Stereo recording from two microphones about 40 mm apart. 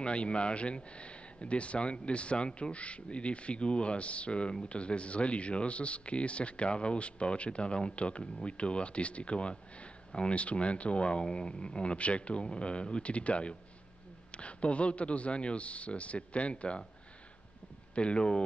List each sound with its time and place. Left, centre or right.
0.0 s speech: left
17.9 s speech: left